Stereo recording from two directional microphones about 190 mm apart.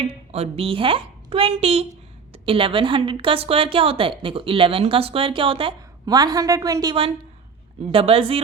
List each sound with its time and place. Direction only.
0.3 s a woman's voice: 30° right (ahead or behind)